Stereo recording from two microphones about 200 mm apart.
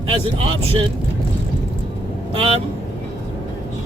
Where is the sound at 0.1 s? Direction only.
25° right (ahead or behind).